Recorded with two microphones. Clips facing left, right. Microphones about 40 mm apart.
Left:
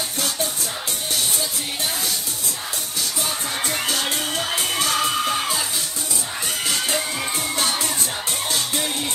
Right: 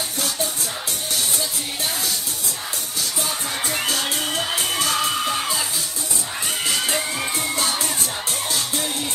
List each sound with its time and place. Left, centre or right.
4.6 s music: left
5.1 s music: centre
7.5 s music: left